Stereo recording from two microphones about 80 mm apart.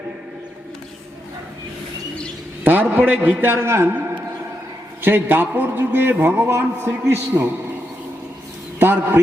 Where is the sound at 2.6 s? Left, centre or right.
Right.